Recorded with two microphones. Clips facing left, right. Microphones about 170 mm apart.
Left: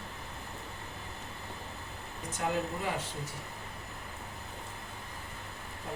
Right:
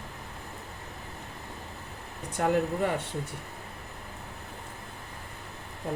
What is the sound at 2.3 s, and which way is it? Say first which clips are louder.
Speech: right 7 dB; 60° right (ahead or behind).